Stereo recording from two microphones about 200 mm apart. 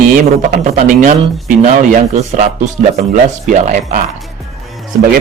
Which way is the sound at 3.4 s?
35° right (ahead or behind).